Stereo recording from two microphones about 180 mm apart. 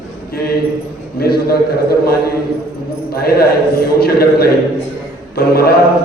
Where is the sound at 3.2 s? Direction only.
60° left (ahead or behind).